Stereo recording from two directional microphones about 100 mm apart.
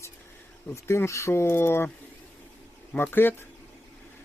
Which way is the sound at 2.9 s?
20° left (ahead or behind).